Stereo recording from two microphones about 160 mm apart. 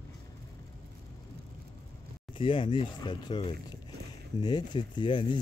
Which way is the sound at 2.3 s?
30° left (ahead or behind).